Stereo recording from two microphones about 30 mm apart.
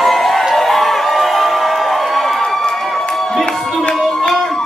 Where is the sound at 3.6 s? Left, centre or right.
Centre.